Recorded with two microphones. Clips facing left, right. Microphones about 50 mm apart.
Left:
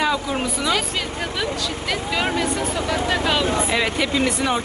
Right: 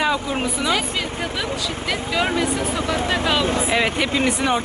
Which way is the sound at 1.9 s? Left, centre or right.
Centre.